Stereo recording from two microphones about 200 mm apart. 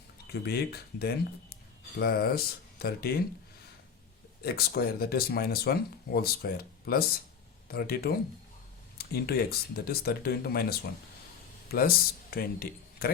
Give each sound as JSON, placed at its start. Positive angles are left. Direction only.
{"t": 0.4, "sound": "speech", "side_deg": 50}
{"t": 4.4, "sound": "speech", "side_deg": 50}